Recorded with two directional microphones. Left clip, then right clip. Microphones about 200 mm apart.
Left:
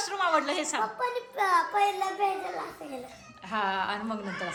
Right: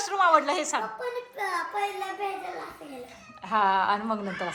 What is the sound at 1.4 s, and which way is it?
Child singing, 30° left (ahead or behind).